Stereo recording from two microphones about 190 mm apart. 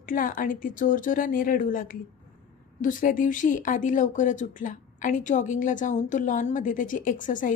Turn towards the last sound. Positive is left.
turn(degrees=45)  # may be behind; listen again after turning